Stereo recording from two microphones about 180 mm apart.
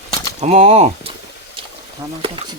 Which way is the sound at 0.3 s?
35° right (ahead or behind).